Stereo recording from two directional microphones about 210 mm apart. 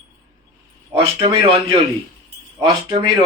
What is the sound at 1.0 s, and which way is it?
Speech, 25° right (ahead or behind).